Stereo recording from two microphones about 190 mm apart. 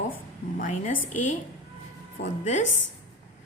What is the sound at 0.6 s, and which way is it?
Speech, 40° left (ahead or behind).